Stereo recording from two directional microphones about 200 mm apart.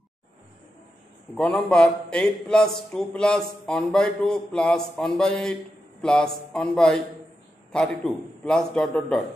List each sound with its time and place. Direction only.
1.3 s a man's voice: 5° left (ahead or behind)